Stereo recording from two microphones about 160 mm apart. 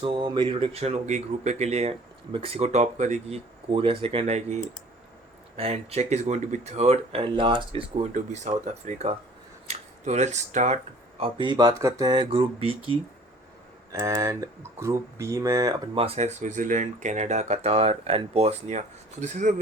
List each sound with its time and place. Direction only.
0.0 s speech: 30° right (ahead or behind); by 3.3 s 45° right (ahead or behind)
3.7 s speech: 35° right (ahead or behind)
8.1 s speech: 45° right (ahead or behind)
11.2 s speech: 30° right (ahead or behind)
14.0 s speech: 20° right (ahead or behind)
16.0 s speech: 40° right (ahead or behind)